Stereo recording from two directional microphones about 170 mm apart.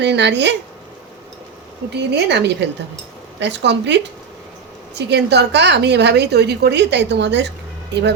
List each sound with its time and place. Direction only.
0.0 s a woman's voice: 90° right
2.0 s a woman's voice: 80° right